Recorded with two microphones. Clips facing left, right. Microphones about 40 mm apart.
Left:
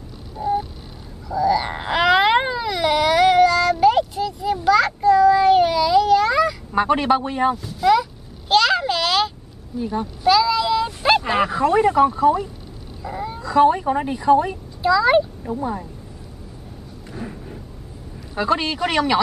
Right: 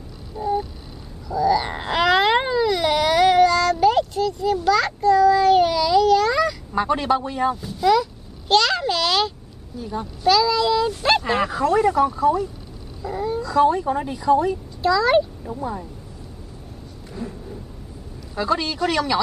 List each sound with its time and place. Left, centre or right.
0.4 s vehicle: centre
1.3 s a sound: centre
6.7 s speech: left
7.5 s a sound: centre
9.8 s speech: left
10.2 s speech: centre
11.6 s speech: left
13.0 s speech: centre
13.4 s speech: left
14.8 s speech: centre
15.4 s speech: left
18.3 s speech: left